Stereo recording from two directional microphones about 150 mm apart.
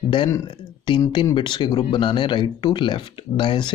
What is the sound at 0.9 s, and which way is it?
Speech, 30° left (ahead or behind).